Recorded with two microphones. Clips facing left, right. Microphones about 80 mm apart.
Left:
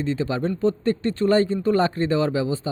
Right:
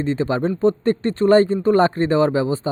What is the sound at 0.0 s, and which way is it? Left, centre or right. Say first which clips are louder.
Speech: right 4 dB; right.